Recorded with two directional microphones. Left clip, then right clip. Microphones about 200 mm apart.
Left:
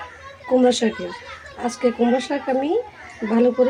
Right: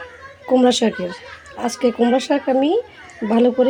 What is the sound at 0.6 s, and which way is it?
A woman's voice, 35° right (ahead or behind).